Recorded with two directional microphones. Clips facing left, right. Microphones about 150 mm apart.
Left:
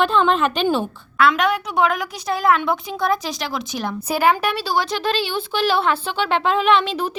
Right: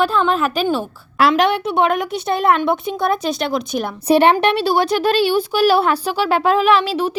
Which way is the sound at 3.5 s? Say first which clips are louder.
Right 4 dB; 25° right (ahead or behind).